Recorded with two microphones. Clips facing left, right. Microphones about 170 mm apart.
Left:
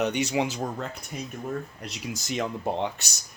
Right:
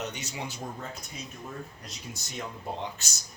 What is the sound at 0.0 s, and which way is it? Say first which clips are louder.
Speech: left 11 dB; 70° left (ahead or behind).